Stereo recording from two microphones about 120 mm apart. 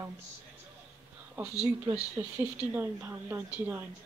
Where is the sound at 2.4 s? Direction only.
20° right (ahead or behind).